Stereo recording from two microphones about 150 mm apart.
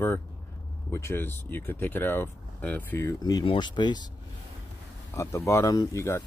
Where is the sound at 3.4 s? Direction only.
30° left (ahead or behind).